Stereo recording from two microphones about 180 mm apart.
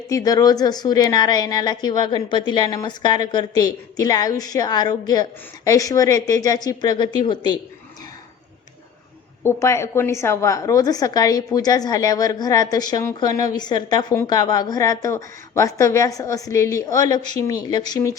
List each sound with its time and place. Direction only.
0.1 s a woman's voice: 20° left (ahead or behind)
9.4 s a woman's voice: 15° left (ahead or behind)